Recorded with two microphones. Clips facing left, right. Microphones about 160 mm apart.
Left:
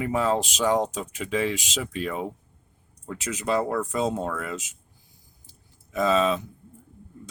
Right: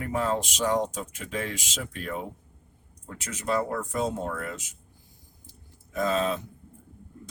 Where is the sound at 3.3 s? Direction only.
80° left.